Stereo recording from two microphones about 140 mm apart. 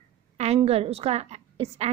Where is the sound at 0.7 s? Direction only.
45° right (ahead or behind).